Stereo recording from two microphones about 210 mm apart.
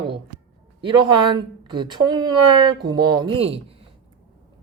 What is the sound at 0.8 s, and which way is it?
Speech, 20° right (ahead or behind).